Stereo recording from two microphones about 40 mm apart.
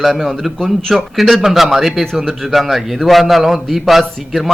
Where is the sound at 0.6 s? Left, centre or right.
Centre.